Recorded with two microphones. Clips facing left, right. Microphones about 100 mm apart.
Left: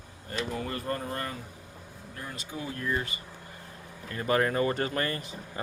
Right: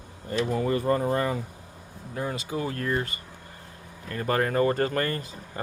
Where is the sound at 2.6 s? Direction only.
60° right (ahead or behind).